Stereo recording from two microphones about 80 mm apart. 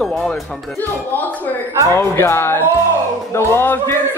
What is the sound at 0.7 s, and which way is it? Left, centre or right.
Speech, left.